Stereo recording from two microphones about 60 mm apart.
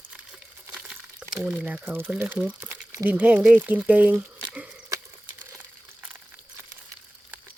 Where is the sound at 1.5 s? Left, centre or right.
Right.